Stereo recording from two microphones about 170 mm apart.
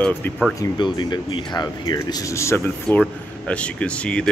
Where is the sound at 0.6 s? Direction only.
25° left (ahead or behind); by 4.3 s 5° left (ahead or behind).